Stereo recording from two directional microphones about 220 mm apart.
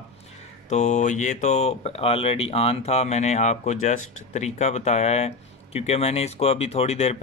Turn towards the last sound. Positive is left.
turn(degrees=30)  # may be behind; listen again after turning